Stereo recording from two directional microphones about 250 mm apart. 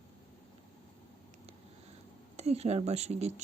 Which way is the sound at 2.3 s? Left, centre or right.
Right.